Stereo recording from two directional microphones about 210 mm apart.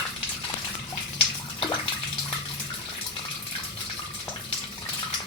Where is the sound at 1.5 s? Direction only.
20° left (ahead or behind).